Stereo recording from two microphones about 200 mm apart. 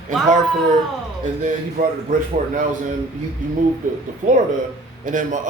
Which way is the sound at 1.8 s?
35° right (ahead or behind).